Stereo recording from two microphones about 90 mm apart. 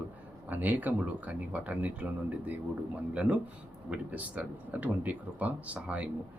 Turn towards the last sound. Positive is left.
turn(degrees=-15)  # may be behind; listen again after turning